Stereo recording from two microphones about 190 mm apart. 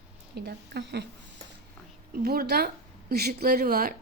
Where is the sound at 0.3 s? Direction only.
60° right (ahead or behind).